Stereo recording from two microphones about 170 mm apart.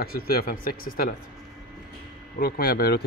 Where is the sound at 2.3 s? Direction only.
60° left (ahead or behind).